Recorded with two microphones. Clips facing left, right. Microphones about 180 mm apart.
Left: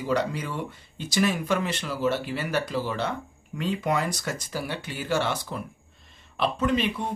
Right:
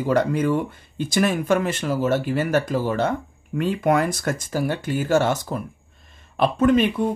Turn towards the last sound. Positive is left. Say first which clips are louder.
# right 7 dB
turn(degrees=-50)  # may be behind; listen again after turning